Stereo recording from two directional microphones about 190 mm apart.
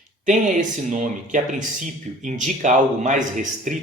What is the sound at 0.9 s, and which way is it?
Speech, 40° right (ahead or behind).